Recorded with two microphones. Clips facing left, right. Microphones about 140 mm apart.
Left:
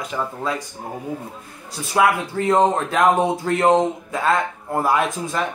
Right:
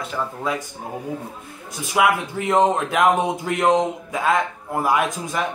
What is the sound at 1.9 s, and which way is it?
Speech, 15° right (ahead or behind).